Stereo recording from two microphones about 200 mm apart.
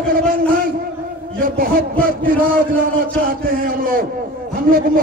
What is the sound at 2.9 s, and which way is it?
A man's voice, 45° right (ahead or behind).